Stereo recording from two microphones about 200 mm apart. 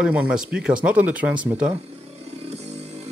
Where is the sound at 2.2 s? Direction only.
35° right (ahead or behind).